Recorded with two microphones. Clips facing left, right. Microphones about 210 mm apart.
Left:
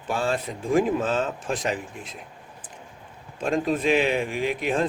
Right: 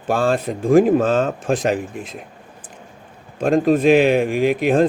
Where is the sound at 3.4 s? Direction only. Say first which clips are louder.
Right 8 dB; 50° right (ahead or behind).